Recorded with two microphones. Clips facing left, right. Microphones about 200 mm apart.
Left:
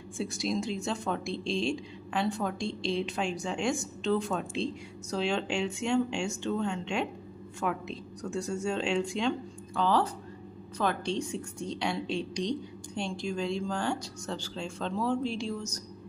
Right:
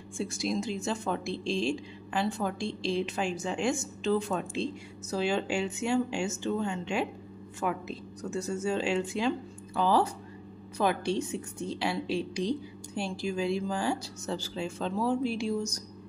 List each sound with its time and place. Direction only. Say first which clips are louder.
0.2 s a woman's voice: even; centre (ahead or behind)